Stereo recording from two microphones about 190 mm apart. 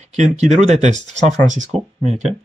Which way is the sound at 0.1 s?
40° right (ahead or behind).